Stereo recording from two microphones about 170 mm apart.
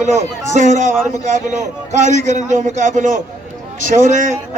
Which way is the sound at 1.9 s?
45° right (ahead or behind).